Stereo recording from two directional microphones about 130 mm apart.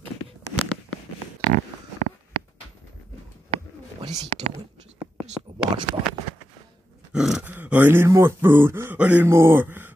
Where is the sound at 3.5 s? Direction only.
55° right (ahead or behind).